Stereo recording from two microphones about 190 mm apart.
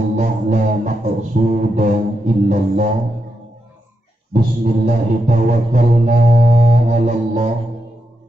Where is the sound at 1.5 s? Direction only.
40° right (ahead or behind).